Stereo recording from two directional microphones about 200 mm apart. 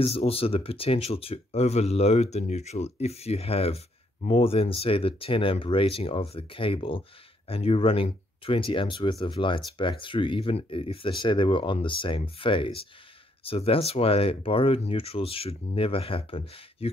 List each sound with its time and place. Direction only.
0.0 s speech: 30° left (ahead or behind)